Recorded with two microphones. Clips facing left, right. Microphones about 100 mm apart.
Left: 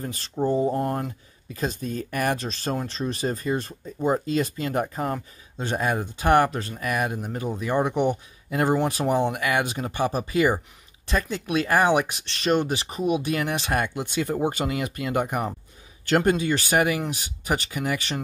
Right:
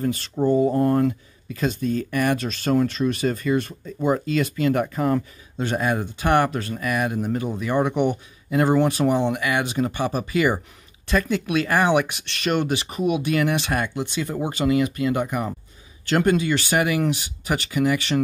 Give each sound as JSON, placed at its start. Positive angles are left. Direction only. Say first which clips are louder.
{"t": 0.4, "sound": "speech", "louder": "right 3 dB", "side_deg": 5}
{"t": 0.7, "sound": "speech", "louder": "right 7 dB", "side_deg": 20}
{"t": 1.5, "sound": "speech", "louder": "right 5 dB", "side_deg": 35}
{"t": 9.0, "sound": "speech", "louder": "right 4 dB", "side_deg": 10}
{"t": 9.3, "sound": "speech", "louder": "right 1 dB", "side_deg": 45}